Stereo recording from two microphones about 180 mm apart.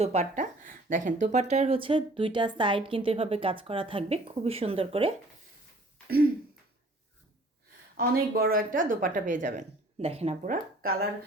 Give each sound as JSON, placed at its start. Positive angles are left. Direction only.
{"t": 0.0, "sound": "speech", "side_deg": -35}
{"t": 6.1, "sound": "throat clearing", "side_deg": -55}
{"t": 7.9, "sound": "a woman's voice", "side_deg": -55}
{"t": 10.4, "sound": "a woman's voice", "side_deg": -50}